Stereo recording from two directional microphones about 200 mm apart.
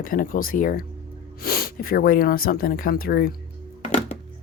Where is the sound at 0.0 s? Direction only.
45° left (ahead or behind).